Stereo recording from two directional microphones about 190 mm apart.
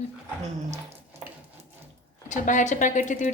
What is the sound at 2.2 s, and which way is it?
Speech, 40° left (ahead or behind).